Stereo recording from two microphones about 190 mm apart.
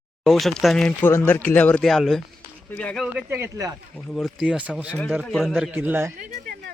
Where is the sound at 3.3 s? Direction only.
15° right (ahead or behind).